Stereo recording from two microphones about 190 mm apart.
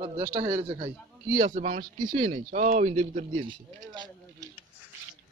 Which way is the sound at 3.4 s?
25° right (ahead or behind).